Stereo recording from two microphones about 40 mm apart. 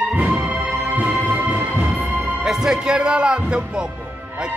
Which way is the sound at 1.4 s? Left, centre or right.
Right.